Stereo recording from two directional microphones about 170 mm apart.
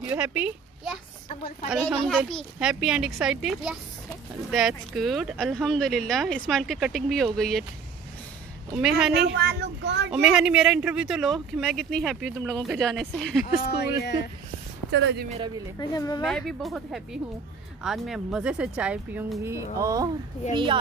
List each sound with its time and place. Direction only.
0.0 s a child's voice: 10° right (ahead or behind)
2.0 s speech: centre (ahead or behind)
8.7 s speech: 5° right (ahead or behind)
9.1 s speech: 80° right
10.1 s speech: 5° right (ahead or behind)
13.7 s speech: 70° left (ahead or behind)
14.9 s speech: 90° right
15.8 s speech: 25° left (ahead or behind)
16.3 s speech: 5° left (ahead or behind)
19.4 s speech: 15° right (ahead or behind)
20.5 s a woman's voice: 30° right (ahead or behind)